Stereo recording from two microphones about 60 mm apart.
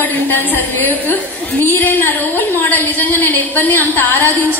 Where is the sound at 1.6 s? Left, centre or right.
Left.